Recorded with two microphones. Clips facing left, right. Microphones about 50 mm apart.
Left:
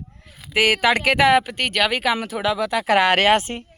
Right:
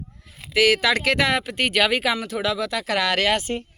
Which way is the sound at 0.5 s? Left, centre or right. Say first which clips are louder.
Left 1 dB; left.